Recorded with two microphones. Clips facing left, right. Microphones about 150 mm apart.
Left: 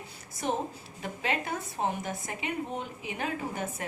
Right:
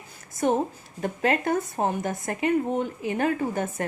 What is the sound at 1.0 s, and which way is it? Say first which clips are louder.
Speech: right 8 dB; 50° right (ahead or behind).